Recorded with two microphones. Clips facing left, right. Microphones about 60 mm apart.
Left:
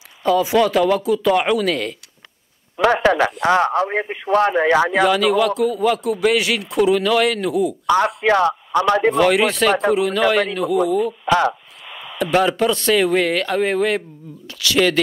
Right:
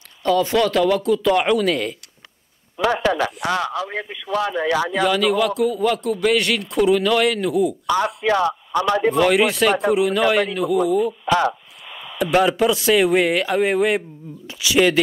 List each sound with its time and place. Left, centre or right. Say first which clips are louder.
0.2 s speech: left 2 dB; centre
2.8 s speech: left 4 dB; left
3.4 s speech: left 6 dB; left
5.0 s speech: left 2 dB; centre
8.2 s speech: left 3 dB; left
9.1 s speech: left 1 dB; centre
11.2 s a sound: left 2 dB; left
12.2 s speech: even; centre